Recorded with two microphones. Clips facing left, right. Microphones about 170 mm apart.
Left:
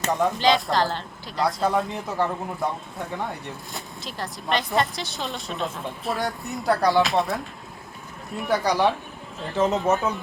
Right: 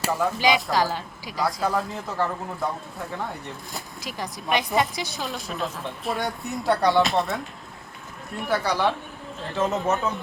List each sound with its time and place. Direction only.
0.0 s speech: 5° right (ahead or behind)
1.9 s speech: 20° left (ahead or behind)
4.7 s speech: centre (ahead or behind)
8.5 s speech: 15° left (ahead or behind)
9.9 s speech: centre (ahead or behind)